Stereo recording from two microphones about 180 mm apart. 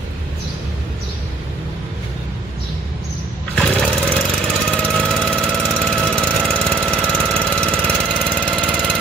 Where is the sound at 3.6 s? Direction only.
5° left (ahead or behind).